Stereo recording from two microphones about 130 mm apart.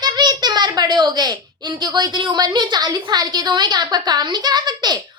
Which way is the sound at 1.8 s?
30° right (ahead or behind).